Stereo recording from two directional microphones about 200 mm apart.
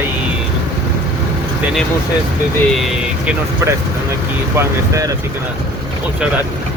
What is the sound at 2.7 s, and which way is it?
Speech, centre (ahead or behind).